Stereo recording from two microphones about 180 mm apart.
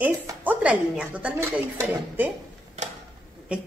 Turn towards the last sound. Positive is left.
turn(degrees=-5)  # may be behind; listen again after turning